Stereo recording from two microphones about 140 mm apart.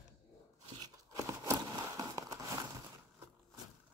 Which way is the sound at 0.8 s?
25° right (ahead or behind).